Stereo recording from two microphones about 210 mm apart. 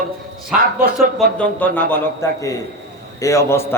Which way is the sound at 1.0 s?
5° left (ahead or behind).